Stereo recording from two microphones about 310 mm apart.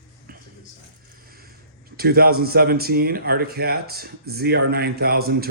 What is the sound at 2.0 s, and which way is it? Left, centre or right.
Speech, right.